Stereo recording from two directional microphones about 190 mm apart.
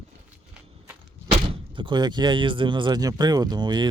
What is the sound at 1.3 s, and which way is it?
Speech, 25° right (ahead or behind).